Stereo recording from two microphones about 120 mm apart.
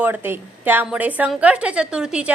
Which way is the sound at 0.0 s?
15° right (ahead or behind).